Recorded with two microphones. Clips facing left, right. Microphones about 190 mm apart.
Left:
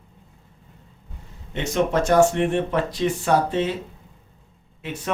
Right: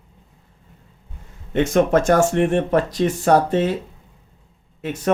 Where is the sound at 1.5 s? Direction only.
50° right (ahead or behind).